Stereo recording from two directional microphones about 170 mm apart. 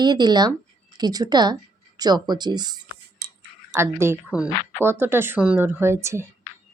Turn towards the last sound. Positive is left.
turn(degrees=-15)  # may be behind; listen again after turning